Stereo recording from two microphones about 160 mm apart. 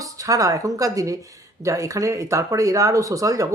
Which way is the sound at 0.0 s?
20° right (ahead or behind).